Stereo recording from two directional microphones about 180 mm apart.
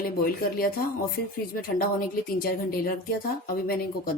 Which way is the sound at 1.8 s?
55° left (ahead or behind).